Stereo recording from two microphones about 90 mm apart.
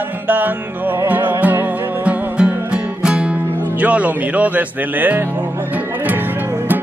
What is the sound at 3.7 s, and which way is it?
Speech, 15° right (ahead or behind).